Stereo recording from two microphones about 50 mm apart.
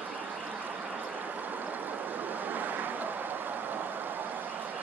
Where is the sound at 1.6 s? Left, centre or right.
Right.